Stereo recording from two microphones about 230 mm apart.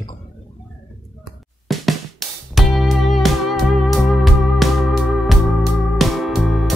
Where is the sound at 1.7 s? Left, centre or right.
Centre.